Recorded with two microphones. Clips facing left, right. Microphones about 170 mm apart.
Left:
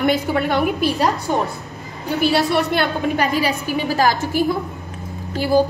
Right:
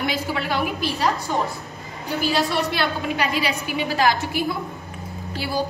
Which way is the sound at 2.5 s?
55° left (ahead or behind).